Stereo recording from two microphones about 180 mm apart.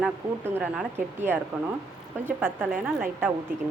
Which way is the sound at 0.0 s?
10° right (ahead or behind).